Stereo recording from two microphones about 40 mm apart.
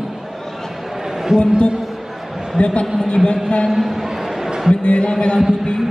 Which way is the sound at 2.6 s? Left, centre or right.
Left.